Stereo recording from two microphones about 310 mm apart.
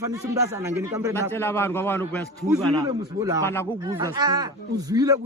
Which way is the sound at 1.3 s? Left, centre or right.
Centre.